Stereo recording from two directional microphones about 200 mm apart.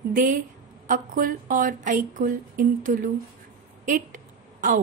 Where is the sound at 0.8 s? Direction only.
45° right (ahead or behind).